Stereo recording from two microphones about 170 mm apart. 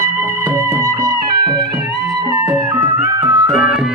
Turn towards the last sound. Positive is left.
turn(degrees=0)  # may be behind; listen again after turning